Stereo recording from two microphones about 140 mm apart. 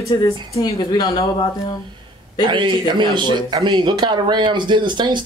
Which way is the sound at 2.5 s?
35° right (ahead or behind).